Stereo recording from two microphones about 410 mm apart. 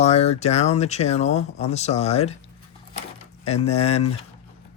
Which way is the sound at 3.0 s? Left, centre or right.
Centre.